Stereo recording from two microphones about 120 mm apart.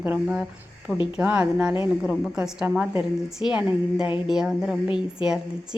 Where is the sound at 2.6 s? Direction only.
20° right (ahead or behind).